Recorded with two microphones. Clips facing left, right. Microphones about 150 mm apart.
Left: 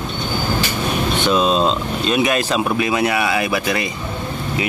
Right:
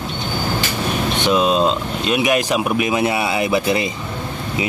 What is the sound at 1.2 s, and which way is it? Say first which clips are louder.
Speech: right 1 dB; 15° right (ahead or behind).